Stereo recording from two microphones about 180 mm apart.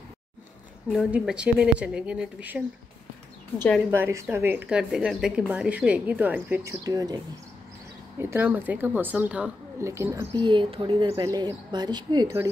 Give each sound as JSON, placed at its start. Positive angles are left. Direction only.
{"t": 0.8, "sound": "a woman's voice", "side_deg": 0}
{"t": 3.9, "sound": "a woman's voice", "side_deg": -10}
{"t": 6.8, "sound": "speech", "side_deg": -20}
{"t": 8.2, "sound": "a woman's voice", "side_deg": -10}
{"t": 10.4, "sound": "speech", "side_deg": -25}